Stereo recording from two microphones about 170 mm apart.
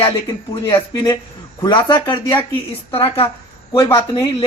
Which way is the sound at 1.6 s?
25° left (ahead or behind).